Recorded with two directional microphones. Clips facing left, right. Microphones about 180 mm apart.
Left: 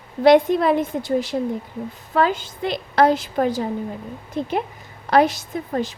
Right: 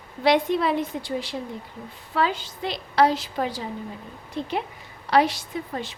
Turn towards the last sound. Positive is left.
turn(degrees=45)  # may be behind; listen again after turning